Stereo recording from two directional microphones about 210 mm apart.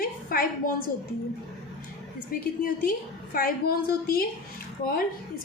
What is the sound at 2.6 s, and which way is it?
A woman's voice, 40° left (ahead or behind).